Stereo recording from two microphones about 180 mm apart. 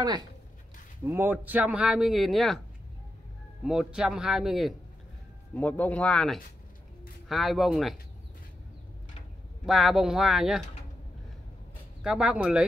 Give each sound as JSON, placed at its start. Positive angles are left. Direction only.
{"t": 0.0, "sound": "speech", "side_deg": -25}
{"t": 1.0, "sound": "a man's voice", "side_deg": -10}
{"t": 3.6, "sound": "speech", "side_deg": -5}
{"t": 9.7, "sound": "speech", "side_deg": 0}
{"t": 12.0, "sound": "speech", "side_deg": -5}